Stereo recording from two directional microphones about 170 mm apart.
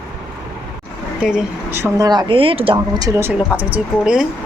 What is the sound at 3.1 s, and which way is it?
Speech, 15° right (ahead or behind).